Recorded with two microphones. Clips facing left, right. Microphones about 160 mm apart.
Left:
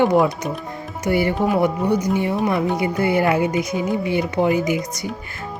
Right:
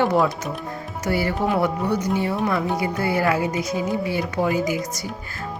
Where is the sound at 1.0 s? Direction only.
20° left (ahead or behind).